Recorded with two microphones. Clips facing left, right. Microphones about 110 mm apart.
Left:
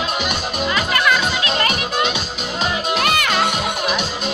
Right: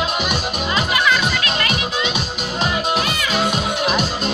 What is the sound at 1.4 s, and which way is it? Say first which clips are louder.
Music: left 2 dB; 30° left (ahead or behind).